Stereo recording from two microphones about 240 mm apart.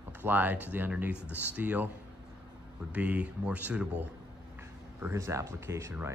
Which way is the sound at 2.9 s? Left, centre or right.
Centre.